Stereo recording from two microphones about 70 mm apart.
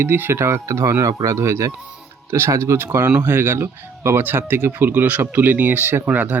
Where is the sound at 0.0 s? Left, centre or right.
Right.